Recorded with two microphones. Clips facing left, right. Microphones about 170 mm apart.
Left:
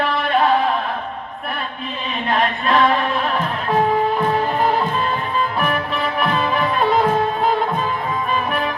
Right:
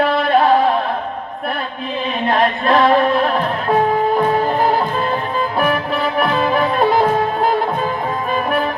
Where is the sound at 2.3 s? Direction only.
40° right (ahead or behind).